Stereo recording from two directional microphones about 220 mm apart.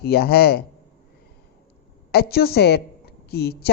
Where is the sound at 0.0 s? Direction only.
45° left (ahead or behind).